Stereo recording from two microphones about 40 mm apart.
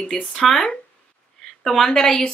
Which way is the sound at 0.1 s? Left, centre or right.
Centre.